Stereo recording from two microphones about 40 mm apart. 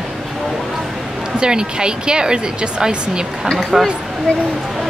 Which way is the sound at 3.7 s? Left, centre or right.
Centre.